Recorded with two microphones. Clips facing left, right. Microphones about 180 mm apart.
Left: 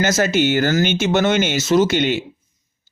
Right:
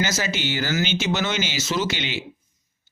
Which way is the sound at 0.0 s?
50° left (ahead or behind).